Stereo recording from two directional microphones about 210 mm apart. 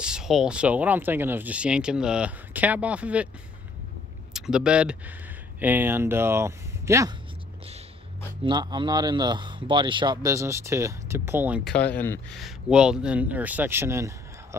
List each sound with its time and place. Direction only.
0.0 s speech: 5° right (ahead or behind)
4.3 s speech: 5° right (ahead or behind)
8.5 s speech: 20° right (ahead or behind)
11.9 s speech: 5° left (ahead or behind); by 14.6 s 15° right (ahead or behind)